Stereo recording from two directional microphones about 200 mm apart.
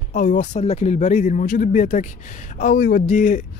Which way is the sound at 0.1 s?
40° left (ahead or behind).